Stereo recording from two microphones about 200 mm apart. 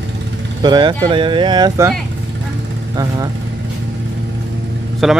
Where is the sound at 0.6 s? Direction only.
20° right (ahead or behind).